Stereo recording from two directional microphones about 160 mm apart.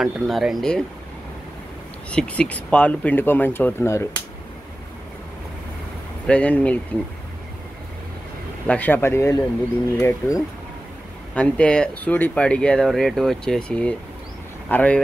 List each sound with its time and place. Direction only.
0.0 s speech: centre (ahead or behind)
2.0 s speech: 5° left (ahead or behind)
6.2 s speech: 10° left (ahead or behind)
8.6 s speech: 10° left (ahead or behind)
11.3 s speech: 5° left (ahead or behind)